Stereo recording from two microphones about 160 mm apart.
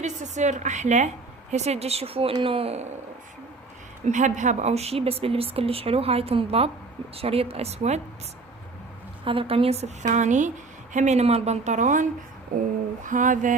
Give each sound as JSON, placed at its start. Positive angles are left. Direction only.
{"t": 0.0, "sound": "a woman's voice", "side_deg": -50}
{"t": 4.0, "sound": "speech", "side_deg": -50}
{"t": 9.2, "sound": "a woman's voice", "side_deg": -35}
{"t": 13.1, "sound": "mantra", "side_deg": -55}